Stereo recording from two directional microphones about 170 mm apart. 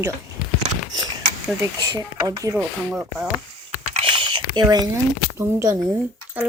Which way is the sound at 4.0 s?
30° right (ahead or behind).